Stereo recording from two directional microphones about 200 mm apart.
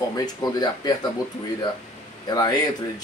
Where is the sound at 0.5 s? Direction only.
20° left (ahead or behind).